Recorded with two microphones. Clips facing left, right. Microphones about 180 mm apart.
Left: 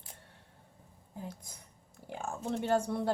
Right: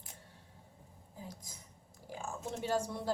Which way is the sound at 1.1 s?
60° left (ahead or behind).